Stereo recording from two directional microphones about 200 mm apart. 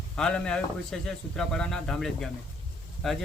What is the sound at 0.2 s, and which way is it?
Speech, 5° left (ahead or behind).